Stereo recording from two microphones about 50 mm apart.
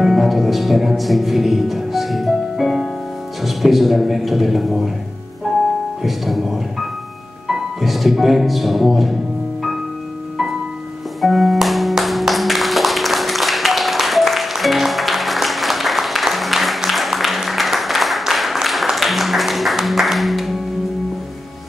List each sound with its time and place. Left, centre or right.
0.0 s music: centre
3.4 s a man's voice: centre
6.0 s a man's voice: centre
11.1 s music: centre